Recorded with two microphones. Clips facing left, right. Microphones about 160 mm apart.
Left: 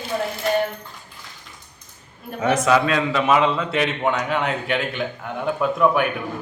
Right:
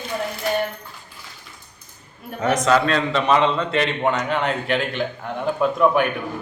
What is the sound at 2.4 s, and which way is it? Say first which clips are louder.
A man's voice: even; 10° left (ahead or behind).